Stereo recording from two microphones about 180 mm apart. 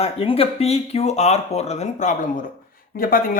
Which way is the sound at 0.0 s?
30° left (ahead or behind).